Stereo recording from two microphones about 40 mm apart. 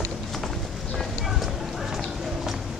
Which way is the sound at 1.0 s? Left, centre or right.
Centre.